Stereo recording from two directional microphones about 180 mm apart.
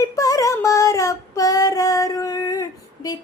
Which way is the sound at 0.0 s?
20° left (ahead or behind).